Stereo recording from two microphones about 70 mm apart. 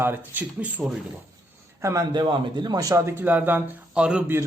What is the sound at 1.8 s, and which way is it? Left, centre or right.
Speech, right.